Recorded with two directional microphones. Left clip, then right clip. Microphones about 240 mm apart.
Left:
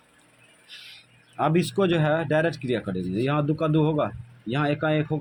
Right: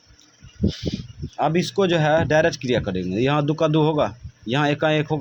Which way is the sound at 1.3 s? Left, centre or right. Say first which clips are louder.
Right 3 dB; centre.